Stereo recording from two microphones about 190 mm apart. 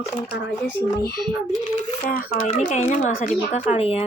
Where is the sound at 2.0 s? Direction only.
50° left (ahead or behind).